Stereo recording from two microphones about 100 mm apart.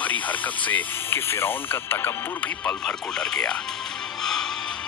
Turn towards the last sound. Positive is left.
turn(degrees=5)  # may be behind; listen again after turning